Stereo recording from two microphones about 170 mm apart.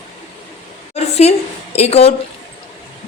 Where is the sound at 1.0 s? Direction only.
40° left (ahead or behind).